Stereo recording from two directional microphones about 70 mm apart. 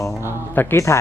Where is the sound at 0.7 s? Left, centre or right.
Left.